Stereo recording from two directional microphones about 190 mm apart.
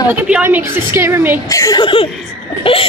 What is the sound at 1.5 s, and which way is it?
Speech, 15° left (ahead or behind).